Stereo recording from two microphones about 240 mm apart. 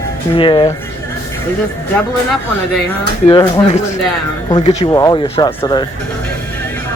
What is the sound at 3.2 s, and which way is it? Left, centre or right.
Speech, centre.